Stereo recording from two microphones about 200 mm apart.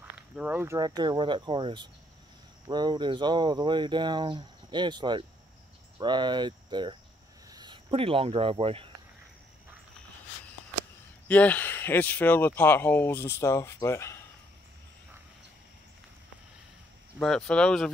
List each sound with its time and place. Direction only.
0.4 s speech: 10° right (ahead or behind)
5.9 s cricket: 20° right (ahead or behind)
7.4 s speech: 20° right (ahead or behind)
11.2 s speech: 5° left (ahead or behind)
17.2 s speech: 5° left (ahead or behind)